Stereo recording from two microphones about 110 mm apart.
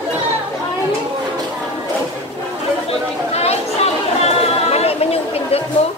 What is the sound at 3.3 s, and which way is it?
Chatter, 75° left (ahead or behind).